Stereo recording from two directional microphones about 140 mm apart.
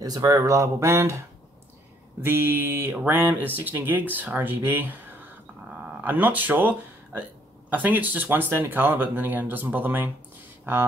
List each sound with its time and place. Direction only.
0.0 s speech: 25° right (ahead or behind)
2.2 s speech: 15° right (ahead or behind)
5.9 s speech: 10° right (ahead or behind)